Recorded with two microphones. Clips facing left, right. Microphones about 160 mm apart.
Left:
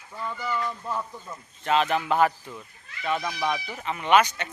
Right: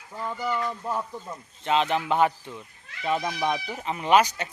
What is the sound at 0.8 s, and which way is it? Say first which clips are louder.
Speech: right 2 dB; 15° right (ahead or behind).